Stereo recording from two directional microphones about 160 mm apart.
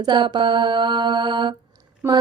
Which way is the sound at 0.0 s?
30° right (ahead or behind).